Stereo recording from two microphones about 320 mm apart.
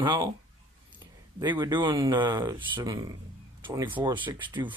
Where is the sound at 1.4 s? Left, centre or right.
Centre.